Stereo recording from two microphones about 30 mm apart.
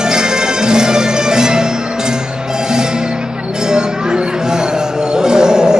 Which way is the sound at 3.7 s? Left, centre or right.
Right.